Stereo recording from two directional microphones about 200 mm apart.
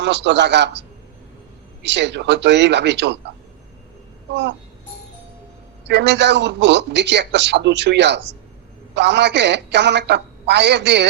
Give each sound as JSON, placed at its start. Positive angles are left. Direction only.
{"t": 0.0, "sound": "a man's voice", "side_deg": -60}
{"t": 1.8, "sound": "a man's voice", "side_deg": -60}
{"t": 5.9, "sound": "a man's voice", "side_deg": -60}